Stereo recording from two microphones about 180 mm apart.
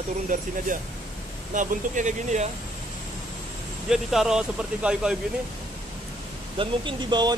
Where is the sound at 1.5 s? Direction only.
45° right (ahead or behind).